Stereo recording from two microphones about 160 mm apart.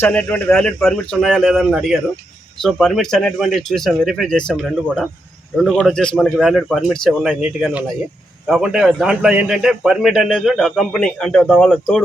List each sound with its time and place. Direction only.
0.0 s a man's voice: 10° left (ahead or behind)